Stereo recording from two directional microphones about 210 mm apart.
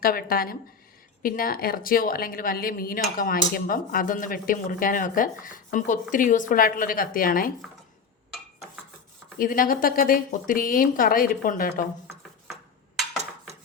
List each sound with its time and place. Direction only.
0.0 s a woman's voice: 45° left (ahead or behind)
9.4 s a woman's voice: 40° left (ahead or behind)